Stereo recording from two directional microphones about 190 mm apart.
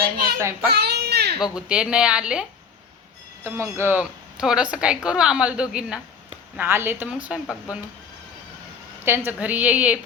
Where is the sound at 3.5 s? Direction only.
15° right (ahead or behind).